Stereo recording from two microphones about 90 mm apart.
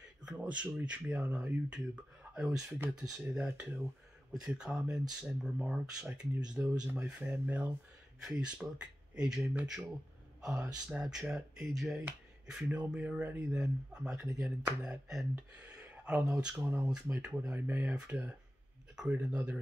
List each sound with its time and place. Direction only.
0.2 s speech: 10° right (ahead or behind)
3.0 s speech: 20° right (ahead or behind)
4.3 s speech: 5° right (ahead or behind)
15.3 s a sound: 15° right (ahead or behind)
16.3 s speech: 10° right (ahead or behind)
17.6 s speech: 20° right (ahead or behind)